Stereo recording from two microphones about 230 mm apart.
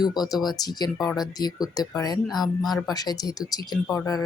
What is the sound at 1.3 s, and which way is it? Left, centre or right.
Speech, centre.